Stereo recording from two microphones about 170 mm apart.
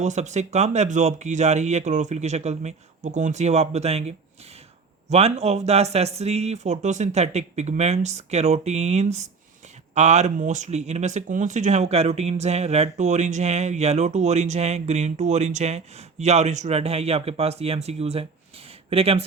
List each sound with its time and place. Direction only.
0.0 s speech: 45° right (ahead or behind)